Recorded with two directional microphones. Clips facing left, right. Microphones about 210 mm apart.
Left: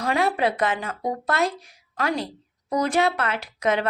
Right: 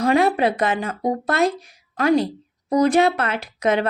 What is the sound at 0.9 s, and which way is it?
Speech, 35° right (ahead or behind).